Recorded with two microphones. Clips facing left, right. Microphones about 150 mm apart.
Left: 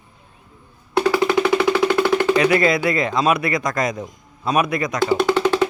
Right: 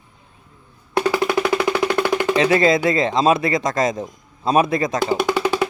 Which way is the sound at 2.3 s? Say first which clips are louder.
Right 4 dB; 25° right (ahead or behind).